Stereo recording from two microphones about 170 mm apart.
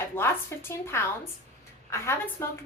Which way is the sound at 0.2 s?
15° left (ahead or behind).